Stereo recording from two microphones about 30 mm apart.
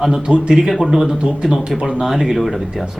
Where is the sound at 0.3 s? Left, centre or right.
Right.